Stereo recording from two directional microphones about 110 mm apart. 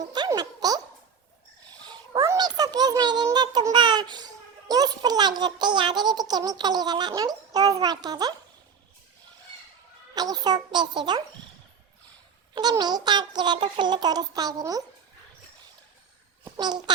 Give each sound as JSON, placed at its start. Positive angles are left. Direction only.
{"t": 0.3, "sound": "a sound", "side_deg": -35}
{"t": 2.2, "sound": "a sound", "side_deg": -35}
{"t": 4.7, "sound": "a child's voice", "side_deg": -35}
{"t": 10.2, "sound": "a child's voice", "side_deg": -40}
{"t": 12.8, "sound": "a child's voice", "side_deg": -40}
{"t": 16.6, "sound": "a child's voice", "side_deg": -40}